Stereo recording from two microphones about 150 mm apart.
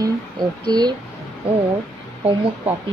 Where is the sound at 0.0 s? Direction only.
30° right (ahead or behind).